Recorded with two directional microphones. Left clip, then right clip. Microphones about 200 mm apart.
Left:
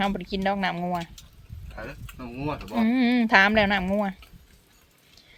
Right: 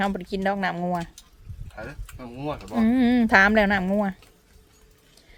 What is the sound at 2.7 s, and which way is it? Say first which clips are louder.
A woman's voice: right 2 dB; 20° right (ahead or behind).